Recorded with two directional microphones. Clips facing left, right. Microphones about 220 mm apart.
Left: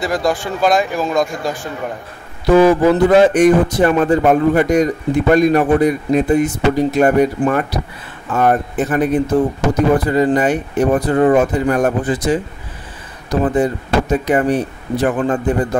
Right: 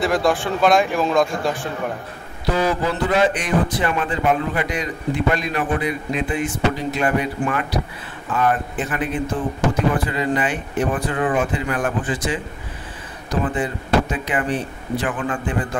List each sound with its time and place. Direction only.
0.0 s speech: centre (ahead or behind)
2.5 s a man's voice: 50° left (ahead or behind)
13.4 s speech: 40° left (ahead or behind)